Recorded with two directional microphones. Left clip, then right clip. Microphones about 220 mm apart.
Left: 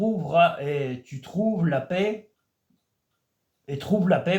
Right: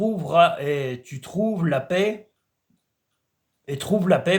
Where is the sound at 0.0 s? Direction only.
40° right (ahead or behind).